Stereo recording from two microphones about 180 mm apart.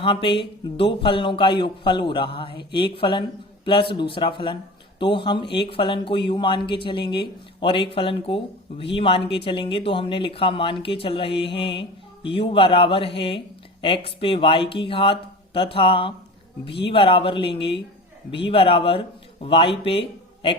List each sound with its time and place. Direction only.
0.0 s a man's voice: 30° left (ahead or behind)